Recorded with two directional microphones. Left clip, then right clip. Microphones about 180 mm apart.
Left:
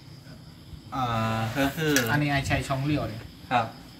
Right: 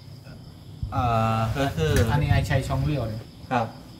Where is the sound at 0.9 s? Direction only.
55° right (ahead or behind).